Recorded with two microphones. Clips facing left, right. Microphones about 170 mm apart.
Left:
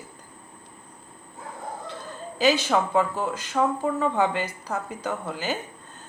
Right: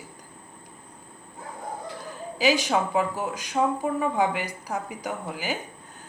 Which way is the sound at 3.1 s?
15° right (ahead or behind).